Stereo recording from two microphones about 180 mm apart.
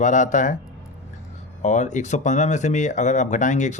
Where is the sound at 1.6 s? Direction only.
40° left (ahead or behind).